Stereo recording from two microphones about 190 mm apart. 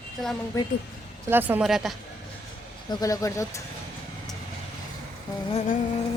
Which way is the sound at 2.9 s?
20° left (ahead or behind).